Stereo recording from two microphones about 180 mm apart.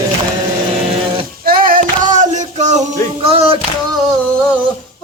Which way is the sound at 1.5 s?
50° right (ahead or behind).